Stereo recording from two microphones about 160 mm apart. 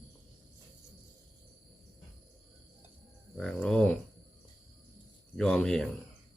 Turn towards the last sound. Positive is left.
turn(degrees=5)  # may be behind; listen again after turning